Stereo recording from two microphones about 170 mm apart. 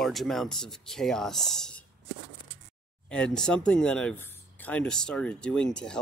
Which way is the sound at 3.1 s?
5° left (ahead or behind).